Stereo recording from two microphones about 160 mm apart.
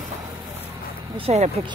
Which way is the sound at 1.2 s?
45° right (ahead or behind).